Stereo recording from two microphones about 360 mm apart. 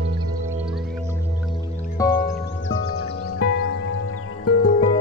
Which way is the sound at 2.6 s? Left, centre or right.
Left.